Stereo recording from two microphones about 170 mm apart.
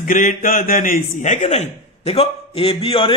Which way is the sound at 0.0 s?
55° left (ahead or behind).